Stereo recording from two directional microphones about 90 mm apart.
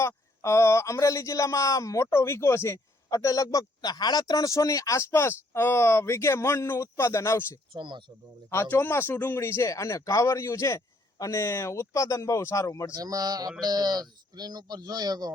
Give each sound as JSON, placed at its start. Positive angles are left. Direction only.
{"t": 0.0, "sound": "speech", "side_deg": 30}
{"t": 3.1, "sound": "speech", "side_deg": 40}
{"t": 7.7, "sound": "speech", "side_deg": -60}
{"t": 8.4, "sound": "speech", "side_deg": 25}
{"t": 12.9, "sound": "speech", "side_deg": -45}